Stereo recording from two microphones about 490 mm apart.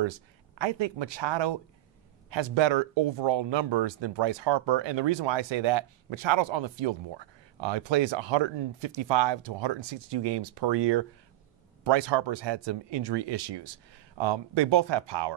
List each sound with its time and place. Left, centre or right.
0.6 s speech: right